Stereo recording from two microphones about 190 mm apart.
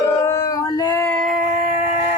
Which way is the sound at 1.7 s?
10° right (ahead or behind).